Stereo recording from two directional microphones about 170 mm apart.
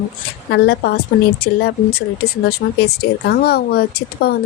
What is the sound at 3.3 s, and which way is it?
Speech, 65° left (ahead or behind).